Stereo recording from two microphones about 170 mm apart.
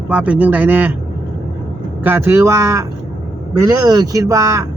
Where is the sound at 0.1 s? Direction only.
5° right (ahead or behind).